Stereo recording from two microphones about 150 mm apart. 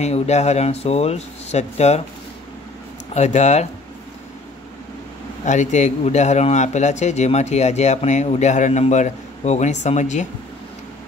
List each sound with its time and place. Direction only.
0.0 s a man's voice: 45° left (ahead or behind)
3.2 s a man's voice: 50° left (ahead or behind)
5.4 s a man's voice: 55° left (ahead or behind)